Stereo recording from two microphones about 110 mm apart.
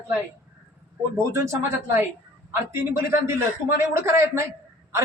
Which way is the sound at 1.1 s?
25° right (ahead or behind).